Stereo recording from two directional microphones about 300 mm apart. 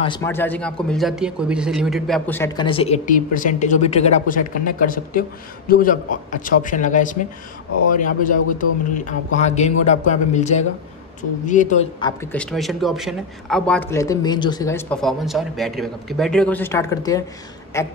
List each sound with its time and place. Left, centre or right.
0.0 s a man's voice: centre
12.2 s a man's voice: centre